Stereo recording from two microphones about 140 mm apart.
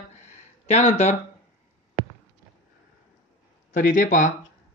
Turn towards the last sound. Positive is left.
turn(degrees=65)  # may be behind; listen again after turning